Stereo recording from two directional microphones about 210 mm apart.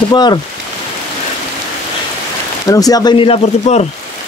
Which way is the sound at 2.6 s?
15° left (ahead or behind).